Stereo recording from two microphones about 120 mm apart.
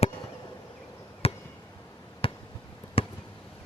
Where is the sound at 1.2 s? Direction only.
55° left (ahead or behind).